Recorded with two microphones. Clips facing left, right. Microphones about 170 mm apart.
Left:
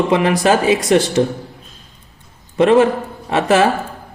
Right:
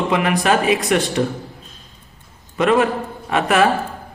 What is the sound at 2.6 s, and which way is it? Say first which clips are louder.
A man's voice: left 5 dB; 30° left (ahead or behind).